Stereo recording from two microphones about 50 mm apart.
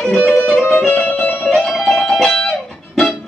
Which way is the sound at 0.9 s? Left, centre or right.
Left.